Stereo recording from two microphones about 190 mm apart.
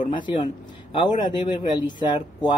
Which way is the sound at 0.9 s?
25° left (ahead or behind).